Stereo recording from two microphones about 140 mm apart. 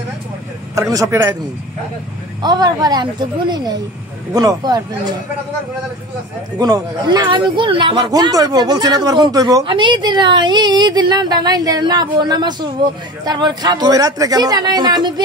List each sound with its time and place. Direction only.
0.7 s a man's voice: 25° right (ahead or behind)
2.4 s a man's voice: 30° right (ahead or behind)
6.6 s a man's voice: 30° right (ahead or behind)